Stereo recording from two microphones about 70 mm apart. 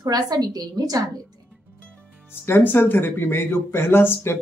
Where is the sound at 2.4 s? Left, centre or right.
Left.